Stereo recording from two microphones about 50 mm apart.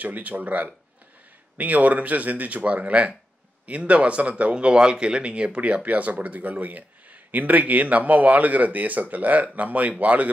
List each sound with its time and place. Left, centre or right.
0.0 s speech: right